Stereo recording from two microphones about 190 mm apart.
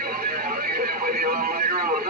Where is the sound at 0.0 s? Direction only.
50° right (ahead or behind).